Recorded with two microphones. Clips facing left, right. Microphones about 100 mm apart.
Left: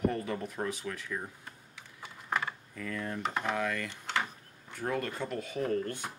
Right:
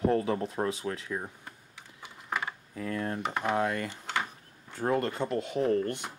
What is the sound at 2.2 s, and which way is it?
Mechanisms, 10° right (ahead or behind).